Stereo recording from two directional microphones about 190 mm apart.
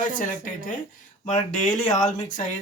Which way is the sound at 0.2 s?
45° left (ahead or behind).